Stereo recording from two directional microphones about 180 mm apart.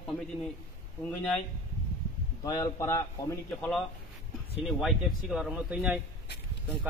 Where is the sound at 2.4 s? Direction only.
20° left (ahead or behind).